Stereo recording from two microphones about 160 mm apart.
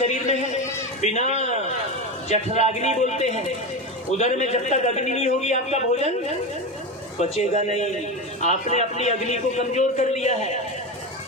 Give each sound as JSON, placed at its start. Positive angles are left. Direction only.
{"t": 0.0, "sound": "run", "side_deg": 45}
{"t": 1.0, "sound": "a man's voice", "side_deg": 45}
{"t": 7.2, "sound": "a man's voice", "side_deg": 45}